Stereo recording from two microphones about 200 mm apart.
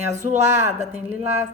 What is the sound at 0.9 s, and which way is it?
Speech, 10° right (ahead or behind).